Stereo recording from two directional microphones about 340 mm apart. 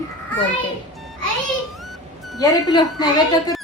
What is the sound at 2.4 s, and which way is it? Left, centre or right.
Speech, centre.